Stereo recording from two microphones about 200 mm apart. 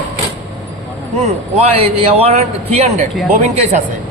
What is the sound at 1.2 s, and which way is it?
A man's voice, 30° right (ahead or behind).